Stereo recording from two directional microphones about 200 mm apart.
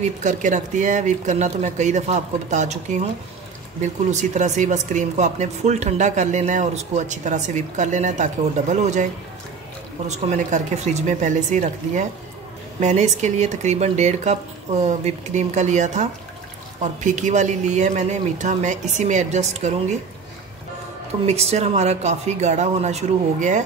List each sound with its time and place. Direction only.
0.2 s speech: 40° right (ahead or behind)
10.0 s speech: 35° right (ahead or behind)
21.3 s speech: 30° right (ahead or behind)